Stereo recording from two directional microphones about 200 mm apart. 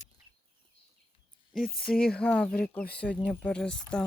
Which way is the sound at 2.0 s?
5° left (ahead or behind).